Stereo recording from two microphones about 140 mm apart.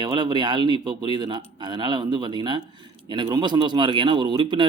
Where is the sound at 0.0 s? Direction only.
30° right (ahead or behind).